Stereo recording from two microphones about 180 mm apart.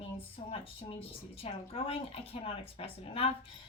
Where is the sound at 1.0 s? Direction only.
30° left (ahead or behind).